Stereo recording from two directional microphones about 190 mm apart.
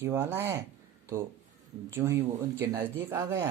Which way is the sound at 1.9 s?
15° right (ahead or behind).